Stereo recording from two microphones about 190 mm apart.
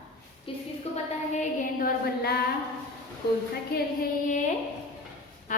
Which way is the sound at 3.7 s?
45° left (ahead or behind).